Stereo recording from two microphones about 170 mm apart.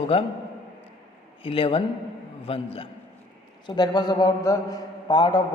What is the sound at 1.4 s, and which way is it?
A man's voice, 35° left (ahead or behind).